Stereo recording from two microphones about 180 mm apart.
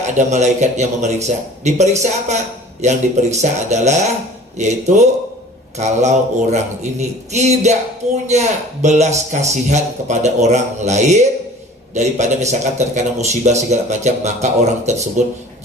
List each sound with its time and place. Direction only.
0.3 s a man's voice: 40° right (ahead or behind)